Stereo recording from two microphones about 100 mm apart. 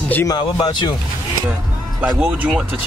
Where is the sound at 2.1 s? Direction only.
15° right (ahead or behind).